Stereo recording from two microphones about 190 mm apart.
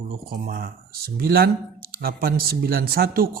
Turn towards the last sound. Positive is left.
turn(degrees=-50)  # may be behind; listen again after turning